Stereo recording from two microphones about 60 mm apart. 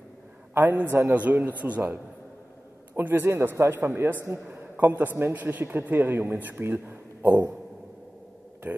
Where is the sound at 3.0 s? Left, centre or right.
Right.